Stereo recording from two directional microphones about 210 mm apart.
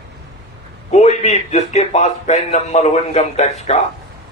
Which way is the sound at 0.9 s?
30° left (ahead or behind).